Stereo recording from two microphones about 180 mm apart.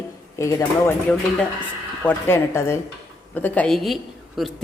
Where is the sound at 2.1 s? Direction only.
15° left (ahead or behind).